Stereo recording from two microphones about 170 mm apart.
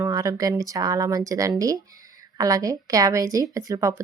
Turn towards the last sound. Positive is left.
turn(degrees=-20)  # may be behind; listen again after turning